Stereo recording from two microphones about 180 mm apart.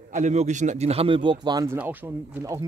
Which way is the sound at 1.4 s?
15° right (ahead or behind).